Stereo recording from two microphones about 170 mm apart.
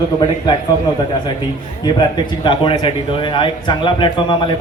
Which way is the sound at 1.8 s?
25° left (ahead or behind).